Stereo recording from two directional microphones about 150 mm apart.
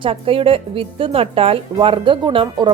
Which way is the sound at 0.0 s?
35° right (ahead or behind).